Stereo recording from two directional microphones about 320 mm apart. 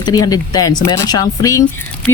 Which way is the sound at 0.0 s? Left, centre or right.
Centre.